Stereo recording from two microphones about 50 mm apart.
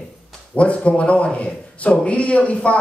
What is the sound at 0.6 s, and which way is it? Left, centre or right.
A man's voice, left.